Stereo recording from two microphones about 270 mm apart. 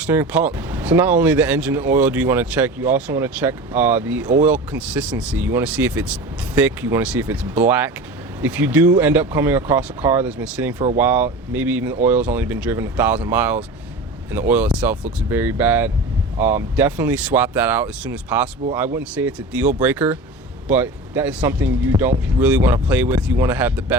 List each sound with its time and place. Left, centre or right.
0.0 s speech: centre